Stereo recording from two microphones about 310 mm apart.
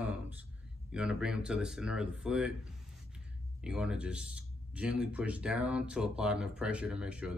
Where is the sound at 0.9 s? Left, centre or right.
Centre.